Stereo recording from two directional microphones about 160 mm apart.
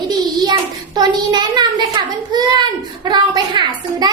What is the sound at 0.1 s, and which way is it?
Hands, 25° right (ahead or behind).